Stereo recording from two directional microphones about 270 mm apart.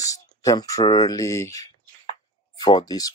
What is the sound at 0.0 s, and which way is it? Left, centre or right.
Speech, centre.